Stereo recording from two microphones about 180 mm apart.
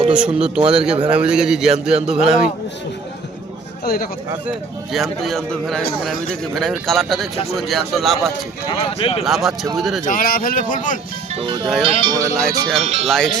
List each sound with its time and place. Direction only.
0.1 s a man's voice: 5° right (ahead or behind)
3.8 s speech: 55° left (ahead or behind)
4.4 s a man's voice: centre (ahead or behind)
8.7 s speech: 30° left (ahead or behind)
9.2 s a man's voice: centre (ahead or behind)
10.0 s speech: 50° left (ahead or behind)
11.3 s speech: 30° right (ahead or behind)
12.8 s speech: 40° right (ahead or behind)
13.1 s a man's voice: 5° left (ahead or behind)